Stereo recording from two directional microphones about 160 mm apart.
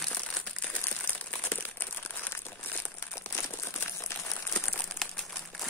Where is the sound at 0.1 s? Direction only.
10° left (ahead or behind).